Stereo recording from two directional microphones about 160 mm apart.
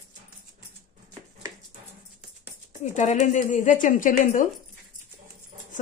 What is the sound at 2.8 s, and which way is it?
Speech, 50° left (ahead or behind).